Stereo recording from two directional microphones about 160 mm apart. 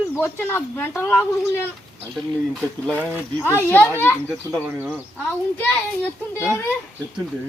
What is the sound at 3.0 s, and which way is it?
A child's voice, 15° left (ahead or behind).